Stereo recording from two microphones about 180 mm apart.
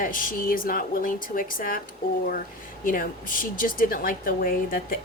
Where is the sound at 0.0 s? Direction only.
50° left (ahead or behind).